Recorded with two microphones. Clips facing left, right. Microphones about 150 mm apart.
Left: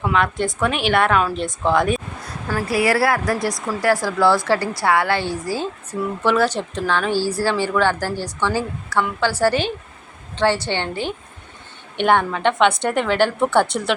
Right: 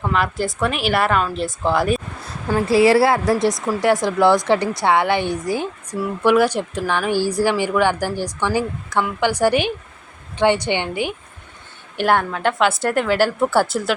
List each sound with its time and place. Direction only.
0.0 s a woman's voice: centre (ahead or behind)
2.5 s a woman's voice: 25° right (ahead or behind); by 13.9 s 5° right (ahead or behind)